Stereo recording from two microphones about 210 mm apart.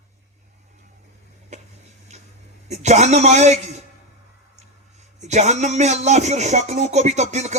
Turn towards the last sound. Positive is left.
turn(degrees=-35)  # may be behind; listen again after turning